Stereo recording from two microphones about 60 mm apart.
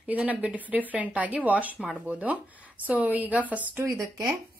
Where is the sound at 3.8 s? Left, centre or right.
Right.